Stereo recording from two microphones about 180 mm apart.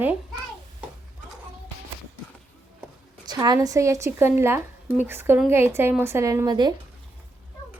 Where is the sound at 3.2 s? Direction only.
25° right (ahead or behind).